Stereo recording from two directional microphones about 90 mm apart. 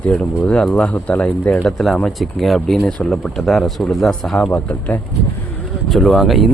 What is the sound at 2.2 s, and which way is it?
Speech, centre (ahead or behind).